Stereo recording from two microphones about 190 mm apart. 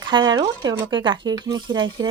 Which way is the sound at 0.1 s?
25° right (ahead or behind).